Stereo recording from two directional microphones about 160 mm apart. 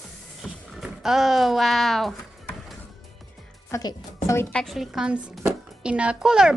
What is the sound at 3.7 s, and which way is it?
Speech, 20° left (ahead or behind).